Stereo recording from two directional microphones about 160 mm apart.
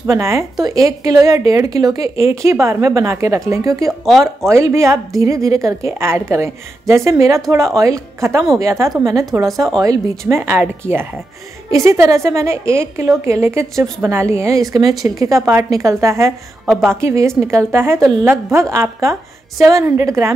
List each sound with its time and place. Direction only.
0.0 s a woman's voice: 15° right (ahead or behind)